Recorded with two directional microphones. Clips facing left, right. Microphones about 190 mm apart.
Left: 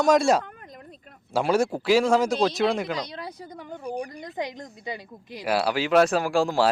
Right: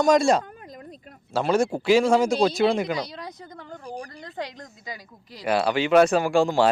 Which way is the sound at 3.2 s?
10° left (ahead or behind).